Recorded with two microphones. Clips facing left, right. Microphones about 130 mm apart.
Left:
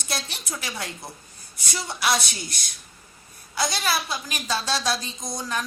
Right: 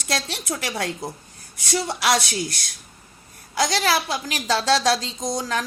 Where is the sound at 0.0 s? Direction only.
85° right.